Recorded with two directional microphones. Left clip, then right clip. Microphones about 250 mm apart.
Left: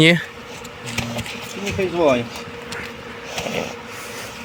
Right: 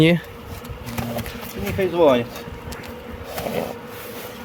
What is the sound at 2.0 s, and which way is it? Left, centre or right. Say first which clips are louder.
Speech: right 2 dB; centre.